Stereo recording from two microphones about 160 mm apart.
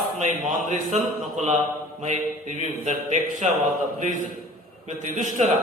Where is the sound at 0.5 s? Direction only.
50° right (ahead or behind).